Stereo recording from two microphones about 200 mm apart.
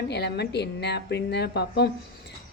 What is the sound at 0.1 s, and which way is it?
A woman's voice, 55° left (ahead or behind).